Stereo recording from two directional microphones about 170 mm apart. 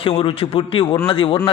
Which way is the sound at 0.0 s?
30° left (ahead or behind).